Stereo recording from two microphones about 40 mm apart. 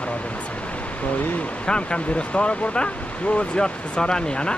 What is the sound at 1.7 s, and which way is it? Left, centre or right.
Speech, left.